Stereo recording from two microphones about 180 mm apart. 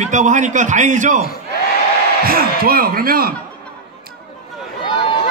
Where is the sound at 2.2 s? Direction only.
55° right (ahead or behind).